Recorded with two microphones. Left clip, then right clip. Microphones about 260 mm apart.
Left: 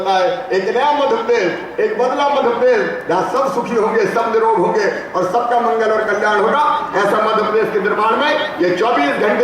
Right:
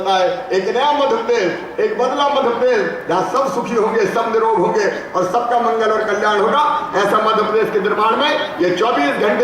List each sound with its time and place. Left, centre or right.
0.7 s a man's voice: centre
2.1 s a man's voice: centre
6.1 s a man's voice: centre